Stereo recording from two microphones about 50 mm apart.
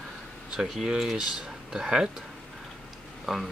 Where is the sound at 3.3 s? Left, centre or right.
Centre.